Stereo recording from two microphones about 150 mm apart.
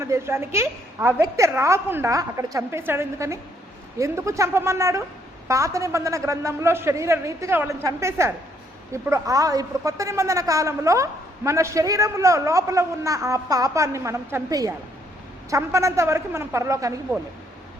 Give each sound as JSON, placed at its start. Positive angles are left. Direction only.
{"t": 0.0, "sound": "a woman's voice", "side_deg": -15}